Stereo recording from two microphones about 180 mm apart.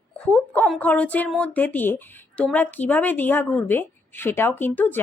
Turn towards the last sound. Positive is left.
turn(degrees=10)  # may be behind; listen again after turning